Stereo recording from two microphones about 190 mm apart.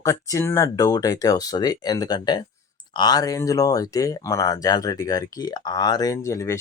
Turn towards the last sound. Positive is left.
turn(degrees=15)  # may be behind; listen again after turning